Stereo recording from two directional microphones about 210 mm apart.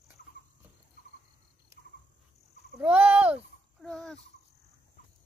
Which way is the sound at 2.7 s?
10° right (ahead or behind).